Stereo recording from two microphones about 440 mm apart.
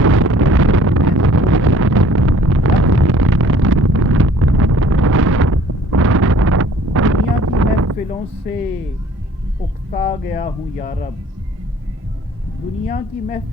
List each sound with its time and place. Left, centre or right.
0.0 s wind noise: right
9.9 s a sound: centre
12.9 s a woman's voice: centre